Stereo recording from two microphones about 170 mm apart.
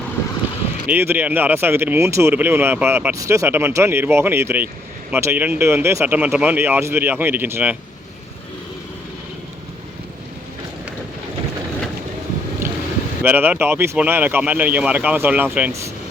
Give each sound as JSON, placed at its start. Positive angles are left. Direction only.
{"t": 0.9, "sound": "speech", "side_deg": -10}
{"t": 12.6, "sound": "boat", "side_deg": -15}
{"t": 13.2, "sound": "speech", "side_deg": -10}